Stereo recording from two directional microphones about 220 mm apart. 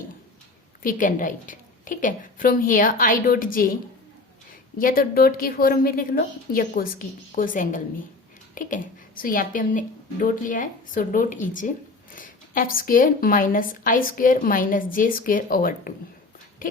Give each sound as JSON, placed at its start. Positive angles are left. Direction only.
{"t": 0.8, "sound": "a woman's voice", "side_deg": 35}
{"t": 4.8, "sound": "a woman's voice", "side_deg": 40}